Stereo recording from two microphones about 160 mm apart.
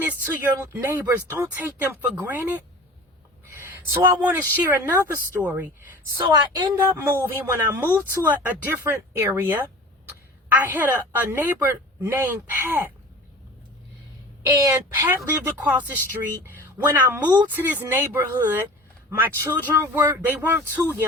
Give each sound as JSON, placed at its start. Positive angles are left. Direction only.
{"t": 0.0, "sound": "speech", "side_deg": -15}
{"t": 3.4, "sound": "a sound", "side_deg": -20}
{"t": 4.3, "sound": "speech", "side_deg": -10}
{"t": 14.4, "sound": "speech", "side_deg": -20}